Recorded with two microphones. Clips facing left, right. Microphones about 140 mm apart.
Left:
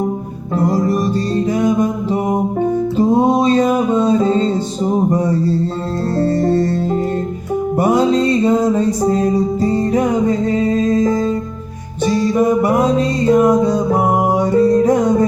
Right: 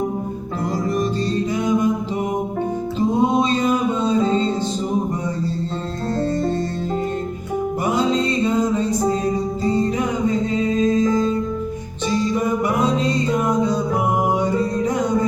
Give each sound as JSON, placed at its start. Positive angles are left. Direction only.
{"t": 1.5, "sound": "music", "side_deg": 50}
{"t": 3.0, "sound": "music", "side_deg": 45}
{"t": 4.9, "sound": "music", "side_deg": 40}
{"t": 7.8, "sound": "music", "side_deg": 50}
{"t": 9.9, "sound": "music", "side_deg": 50}